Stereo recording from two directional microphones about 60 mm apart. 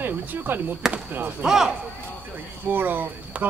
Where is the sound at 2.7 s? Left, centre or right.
Right.